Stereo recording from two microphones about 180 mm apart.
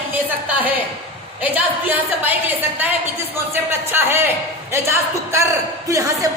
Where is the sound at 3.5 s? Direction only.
10° right (ahead or behind).